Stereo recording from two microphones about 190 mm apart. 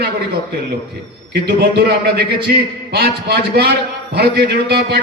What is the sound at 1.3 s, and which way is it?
Speech, 55° right (ahead or behind).